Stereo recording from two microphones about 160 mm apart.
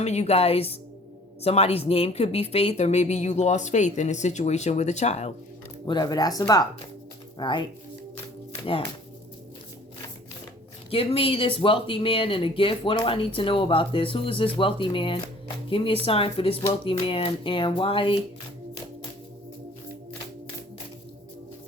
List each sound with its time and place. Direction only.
0.0 s speech: 45° left (ahead or behind)
5.8 s speech: 25° left (ahead or behind)
10.9 s speech: 35° left (ahead or behind)